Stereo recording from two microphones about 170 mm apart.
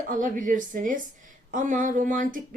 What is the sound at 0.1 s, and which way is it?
Speech, 50° right (ahead or behind).